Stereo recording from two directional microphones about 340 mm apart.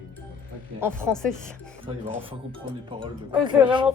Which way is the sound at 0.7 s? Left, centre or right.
Centre.